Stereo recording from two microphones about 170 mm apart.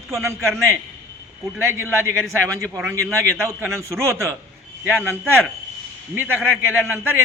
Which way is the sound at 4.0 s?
15° right (ahead or behind).